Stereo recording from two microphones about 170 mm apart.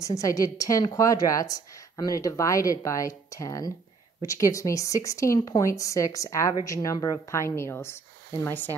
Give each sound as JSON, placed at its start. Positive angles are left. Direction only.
{"t": 0.0, "sound": "a woman's voice", "side_deg": 20}